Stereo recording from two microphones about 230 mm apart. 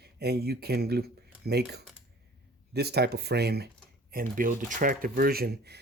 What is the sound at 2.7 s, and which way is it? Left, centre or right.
Speech, right.